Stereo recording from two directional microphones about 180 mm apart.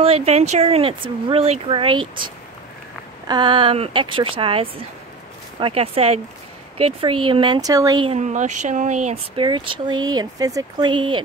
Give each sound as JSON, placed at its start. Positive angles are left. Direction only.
{"t": 0.0, "sound": "speech", "side_deg": -35}
{"t": 8.1, "sound": "speech", "side_deg": -40}